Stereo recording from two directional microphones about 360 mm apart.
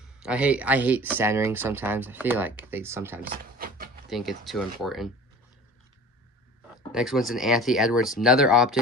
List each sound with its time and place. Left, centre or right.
0.0 s speech: centre
3.2 s a sound: right
4.1 s speech: centre
6.9 s speech: centre